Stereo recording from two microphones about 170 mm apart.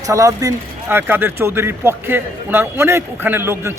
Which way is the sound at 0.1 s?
20° right (ahead or behind).